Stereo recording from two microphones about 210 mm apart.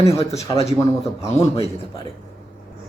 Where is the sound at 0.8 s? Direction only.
30° left (ahead or behind).